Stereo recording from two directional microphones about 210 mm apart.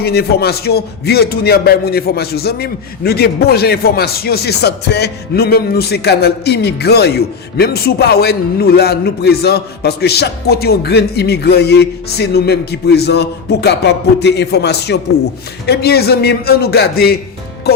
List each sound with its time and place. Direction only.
0.0 s speech: 50° left (ahead or behind)